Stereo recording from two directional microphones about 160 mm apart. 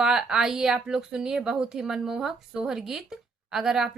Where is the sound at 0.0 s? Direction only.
5° right (ahead or behind).